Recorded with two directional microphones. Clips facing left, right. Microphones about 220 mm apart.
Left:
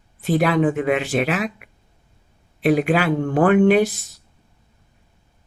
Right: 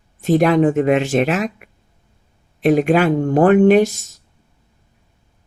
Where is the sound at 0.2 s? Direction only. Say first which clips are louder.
Right 4 dB; 45° right (ahead or behind).